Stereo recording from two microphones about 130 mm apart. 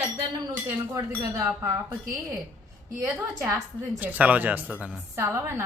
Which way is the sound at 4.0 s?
10° right (ahead or behind).